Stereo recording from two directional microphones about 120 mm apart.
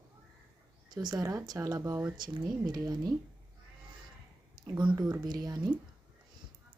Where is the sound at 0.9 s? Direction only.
35° right (ahead or behind).